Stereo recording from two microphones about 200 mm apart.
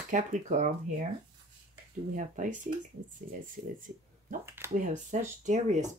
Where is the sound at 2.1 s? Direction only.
40° right (ahead or behind).